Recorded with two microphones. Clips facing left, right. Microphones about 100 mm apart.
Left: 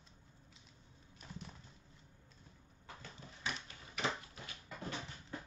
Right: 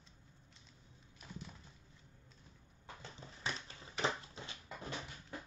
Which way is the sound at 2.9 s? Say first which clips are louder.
Right 2 dB; 30° right (ahead or behind).